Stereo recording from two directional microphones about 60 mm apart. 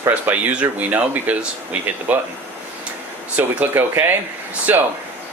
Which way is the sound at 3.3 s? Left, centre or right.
Right.